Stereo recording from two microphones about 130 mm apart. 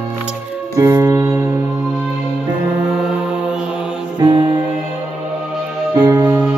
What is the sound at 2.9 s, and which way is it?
Mantra, 5° right (ahead or behind).